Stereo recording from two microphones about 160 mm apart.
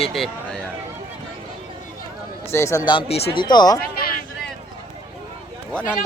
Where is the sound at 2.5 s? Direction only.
15° left (ahead or behind).